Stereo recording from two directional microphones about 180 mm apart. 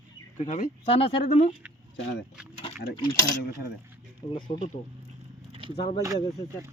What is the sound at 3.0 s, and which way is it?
Speech, 25° left (ahead or behind).